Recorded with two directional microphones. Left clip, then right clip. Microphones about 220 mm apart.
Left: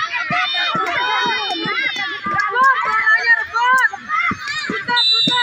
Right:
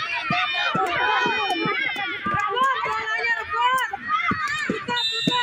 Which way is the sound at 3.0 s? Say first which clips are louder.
Left 10 dB; 10° left (ahead or behind).